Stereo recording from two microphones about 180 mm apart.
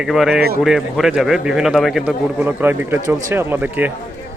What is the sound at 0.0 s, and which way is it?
A man's voice, centre (ahead or behind).